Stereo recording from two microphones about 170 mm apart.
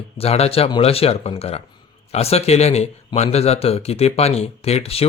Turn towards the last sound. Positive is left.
turn(degrees=35)  # may be behind; listen again after turning